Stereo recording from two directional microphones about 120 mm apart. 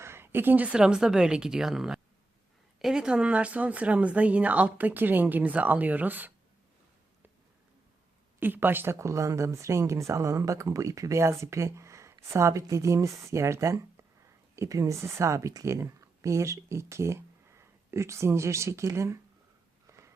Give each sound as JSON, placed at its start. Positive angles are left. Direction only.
{"t": 0.0, "sound": "a woman's voice", "side_deg": -20}
{"t": 8.4, "sound": "speech", "side_deg": -15}